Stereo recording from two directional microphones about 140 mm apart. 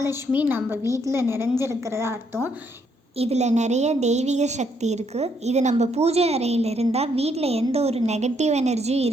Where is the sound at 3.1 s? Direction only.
50° right (ahead or behind).